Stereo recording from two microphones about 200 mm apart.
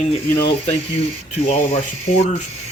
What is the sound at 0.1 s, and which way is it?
Speech, 30° left (ahead or behind).